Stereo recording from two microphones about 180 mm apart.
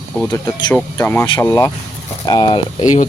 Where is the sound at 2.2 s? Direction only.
25° left (ahead or behind).